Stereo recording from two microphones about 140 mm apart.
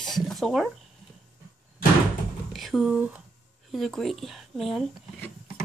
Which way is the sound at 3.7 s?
Centre (ahead or behind).